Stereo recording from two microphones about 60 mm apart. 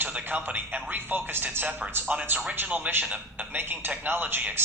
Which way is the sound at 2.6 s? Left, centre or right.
Right.